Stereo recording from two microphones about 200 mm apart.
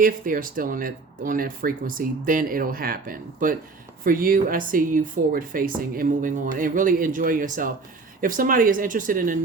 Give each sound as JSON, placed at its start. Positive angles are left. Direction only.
{"t": 0.0, "sound": "speech", "side_deg": -45}